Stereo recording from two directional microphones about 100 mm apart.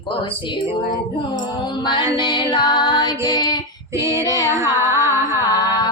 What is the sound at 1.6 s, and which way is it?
Music, 50° left (ahead or behind).